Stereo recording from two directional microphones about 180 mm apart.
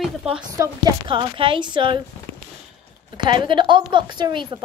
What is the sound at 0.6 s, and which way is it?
A woman's voice, 25° right (ahead or behind).